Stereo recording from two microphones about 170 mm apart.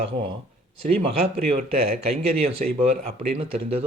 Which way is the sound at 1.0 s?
35° right (ahead or behind).